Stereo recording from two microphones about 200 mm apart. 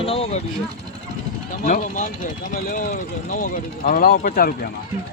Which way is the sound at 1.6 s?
40° left (ahead or behind).